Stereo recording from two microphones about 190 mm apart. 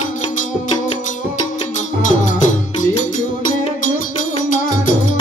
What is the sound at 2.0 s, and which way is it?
Music, 40° left (ahead or behind).